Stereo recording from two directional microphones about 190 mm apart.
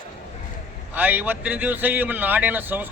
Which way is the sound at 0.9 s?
10° right (ahead or behind).